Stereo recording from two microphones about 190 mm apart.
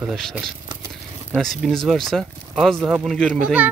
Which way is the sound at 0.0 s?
Centre (ahead or behind).